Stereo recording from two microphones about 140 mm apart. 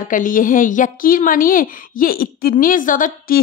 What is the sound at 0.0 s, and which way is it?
A woman's voice, 70° left (ahead or behind).